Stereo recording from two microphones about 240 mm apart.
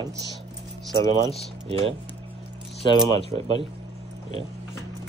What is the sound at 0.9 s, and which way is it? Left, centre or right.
Speech, right.